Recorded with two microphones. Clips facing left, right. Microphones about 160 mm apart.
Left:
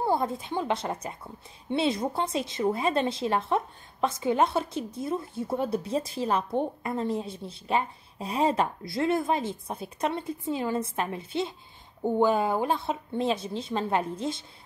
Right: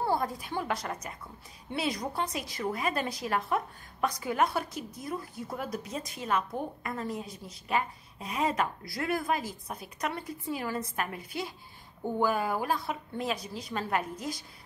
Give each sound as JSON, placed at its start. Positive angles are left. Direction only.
{"t": 0.0, "sound": "a woman's voice", "side_deg": 20}